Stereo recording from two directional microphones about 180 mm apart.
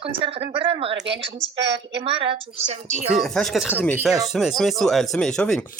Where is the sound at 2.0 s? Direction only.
30° right (ahead or behind).